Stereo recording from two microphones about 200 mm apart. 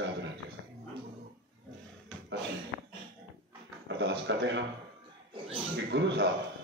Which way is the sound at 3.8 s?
60° right (ahead or behind).